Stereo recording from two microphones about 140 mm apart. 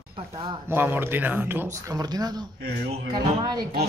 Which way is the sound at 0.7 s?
15° right (ahead or behind).